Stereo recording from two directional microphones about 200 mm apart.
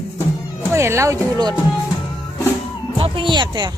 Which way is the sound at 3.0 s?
25° right (ahead or behind).